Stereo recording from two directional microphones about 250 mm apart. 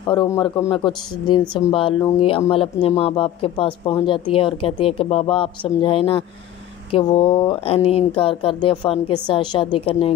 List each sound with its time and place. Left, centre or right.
0.1 s speech: centre